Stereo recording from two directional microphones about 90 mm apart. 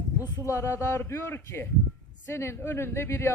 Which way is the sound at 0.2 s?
35° left (ahead or behind).